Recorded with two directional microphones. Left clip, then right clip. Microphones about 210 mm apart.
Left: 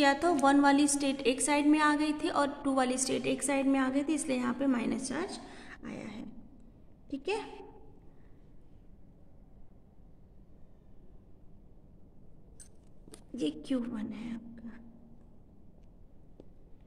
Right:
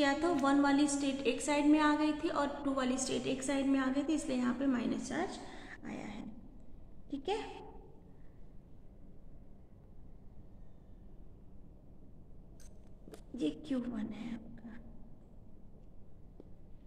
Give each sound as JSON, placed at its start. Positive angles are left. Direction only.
{"t": 0.0, "sound": "a woman's voice", "side_deg": 55}
{"t": 13.4, "sound": "a woman's voice", "side_deg": 55}